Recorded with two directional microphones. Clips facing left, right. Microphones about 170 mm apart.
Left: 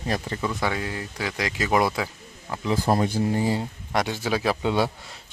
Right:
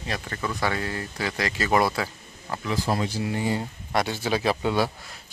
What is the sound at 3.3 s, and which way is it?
Speech, 35° left (ahead or behind).